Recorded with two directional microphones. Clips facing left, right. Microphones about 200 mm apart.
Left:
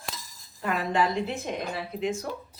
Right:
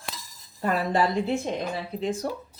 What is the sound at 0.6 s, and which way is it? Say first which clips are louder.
Speech: right 2 dB; 35° right (ahead or behind).